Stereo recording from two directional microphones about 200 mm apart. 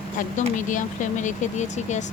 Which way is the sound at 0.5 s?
40° left (ahead or behind).